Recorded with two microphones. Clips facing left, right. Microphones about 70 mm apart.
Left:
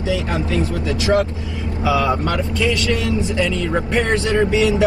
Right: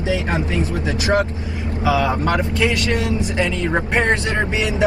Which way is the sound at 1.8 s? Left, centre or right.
Right.